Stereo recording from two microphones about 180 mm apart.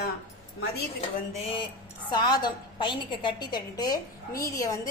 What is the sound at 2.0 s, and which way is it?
A woman's voice, 25° left (ahead or behind).